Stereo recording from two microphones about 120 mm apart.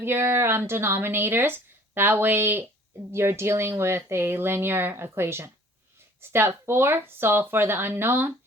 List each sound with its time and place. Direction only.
0.0 s a woman's voice: 20° right (ahead or behind)